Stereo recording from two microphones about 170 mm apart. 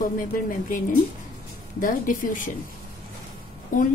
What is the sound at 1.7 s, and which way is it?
Speech, 55° left (ahead or behind).